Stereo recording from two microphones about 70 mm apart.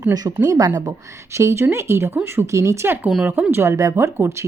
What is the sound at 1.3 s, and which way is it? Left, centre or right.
A woman's voice, right.